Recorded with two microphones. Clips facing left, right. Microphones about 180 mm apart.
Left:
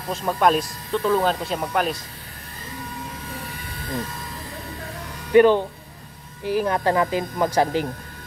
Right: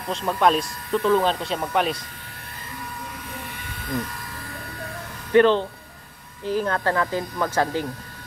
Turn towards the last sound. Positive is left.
turn(degrees=15)  # may be behind; listen again after turning